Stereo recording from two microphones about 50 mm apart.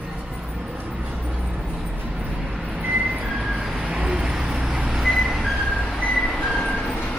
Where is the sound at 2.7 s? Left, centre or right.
Right.